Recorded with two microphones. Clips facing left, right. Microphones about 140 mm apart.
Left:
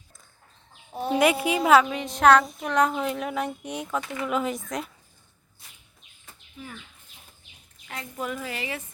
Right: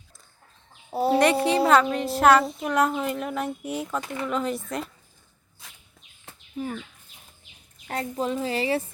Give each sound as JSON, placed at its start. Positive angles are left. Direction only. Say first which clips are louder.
{"t": 0.9, "sound": "speech", "louder": "right 5 dB", "side_deg": -35}
{"t": 1.2, "sound": "speech", "louder": "left 1 dB", "side_deg": 5}
{"t": 5.6, "sound": "bird", "louder": "right 5 dB", "side_deg": -90}
{"t": 6.6, "sound": "speech", "louder": "right 11 dB", "side_deg": -40}
{"t": 8.1, "sound": "speech", "louder": "right 5 dB", "side_deg": -30}